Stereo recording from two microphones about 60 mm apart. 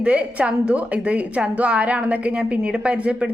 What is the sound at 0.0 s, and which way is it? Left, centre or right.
A woman's voice, right.